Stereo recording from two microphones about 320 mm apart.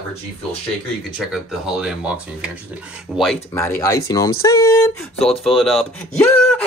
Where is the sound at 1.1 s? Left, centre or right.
Centre.